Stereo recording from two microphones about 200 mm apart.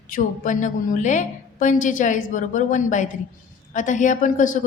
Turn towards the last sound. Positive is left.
turn(degrees=40)  # may be behind; listen again after turning